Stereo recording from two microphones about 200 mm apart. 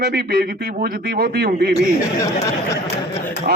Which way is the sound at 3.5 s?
45° right (ahead or behind).